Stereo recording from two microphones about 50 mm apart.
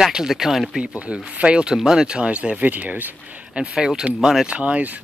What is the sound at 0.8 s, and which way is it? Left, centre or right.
Speech, right.